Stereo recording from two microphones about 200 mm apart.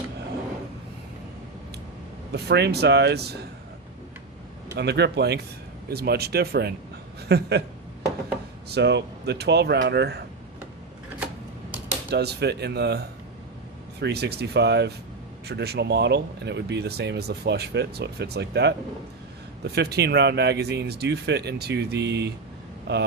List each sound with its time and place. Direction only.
2.3 s speech: 55° right (ahead or behind)
4.8 s speech: 60° right (ahead or behind)
8.7 s speech: 60° right (ahead or behind)
12.1 s speech: 55° right (ahead or behind)